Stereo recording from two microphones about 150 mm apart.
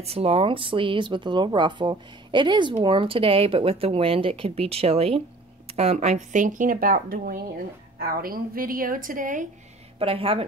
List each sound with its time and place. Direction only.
0.0 s a woman's voice: 40° right (ahead or behind); by 9.5 s 60° right (ahead or behind)
9.9 s speech: 40° right (ahead or behind)